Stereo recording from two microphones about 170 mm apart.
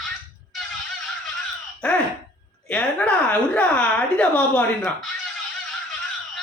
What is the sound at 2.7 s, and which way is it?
A woman's voice, 5° left (ahead or behind).